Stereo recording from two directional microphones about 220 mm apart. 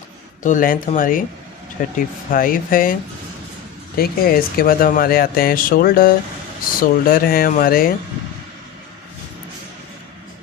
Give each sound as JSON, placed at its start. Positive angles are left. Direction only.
{"t": 0.4, "sound": "speech", "side_deg": 35}